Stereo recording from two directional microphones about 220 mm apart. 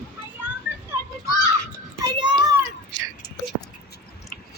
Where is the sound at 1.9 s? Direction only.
15° right (ahead or behind).